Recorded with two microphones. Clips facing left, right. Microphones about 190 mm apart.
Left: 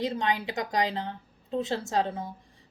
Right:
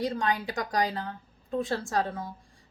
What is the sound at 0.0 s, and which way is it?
A woman's voice, 20° left (ahead or behind).